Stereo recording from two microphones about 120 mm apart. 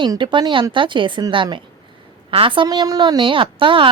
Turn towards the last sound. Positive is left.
turn(degrees=-45)  # may be behind; listen again after turning